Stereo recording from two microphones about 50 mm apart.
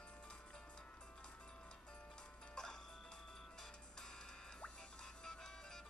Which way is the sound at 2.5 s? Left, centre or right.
Centre.